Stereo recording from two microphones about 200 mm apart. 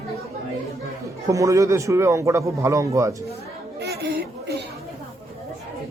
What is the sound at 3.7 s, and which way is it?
Chatter, 55° right (ahead or behind).